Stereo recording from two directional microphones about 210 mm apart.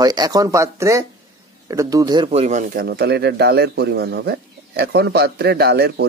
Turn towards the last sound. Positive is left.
turn(degrees=-50)  # may be behind; listen again after turning